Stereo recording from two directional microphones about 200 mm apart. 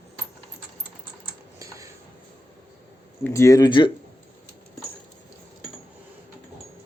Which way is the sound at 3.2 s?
15° left (ahead or behind).